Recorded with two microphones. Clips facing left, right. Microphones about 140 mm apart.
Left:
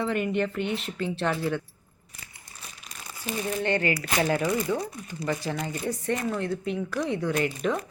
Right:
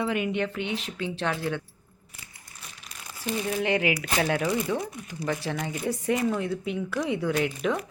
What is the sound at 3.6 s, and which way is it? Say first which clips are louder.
Speech: even; 5° right (ahead or behind).